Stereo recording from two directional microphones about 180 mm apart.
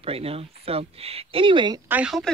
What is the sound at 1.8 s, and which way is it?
Speech, 5° right (ahead or behind).